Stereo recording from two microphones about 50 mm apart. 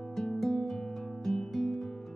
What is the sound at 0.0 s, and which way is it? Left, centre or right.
Music, centre.